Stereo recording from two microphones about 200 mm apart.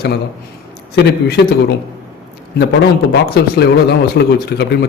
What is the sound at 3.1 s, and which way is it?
A man's voice, 55° left (ahead or behind).